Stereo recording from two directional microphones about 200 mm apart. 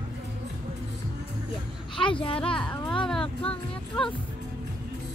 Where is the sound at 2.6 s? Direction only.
5° left (ahead or behind).